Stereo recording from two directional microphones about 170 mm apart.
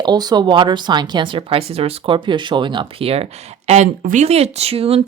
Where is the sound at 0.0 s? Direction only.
25° right (ahead or behind).